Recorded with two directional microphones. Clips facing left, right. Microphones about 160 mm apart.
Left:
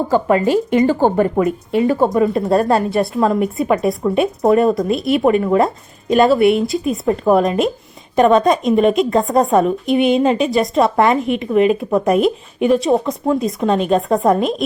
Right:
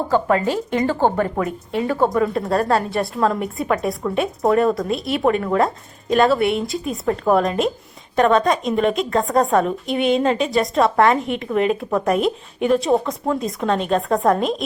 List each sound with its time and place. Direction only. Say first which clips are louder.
0.1 s a woman's voice: left 4 dB; 15° left (ahead or behind)